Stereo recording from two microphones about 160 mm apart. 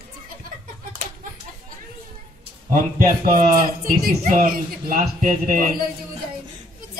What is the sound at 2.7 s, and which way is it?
Speech, 60° right (ahead or behind).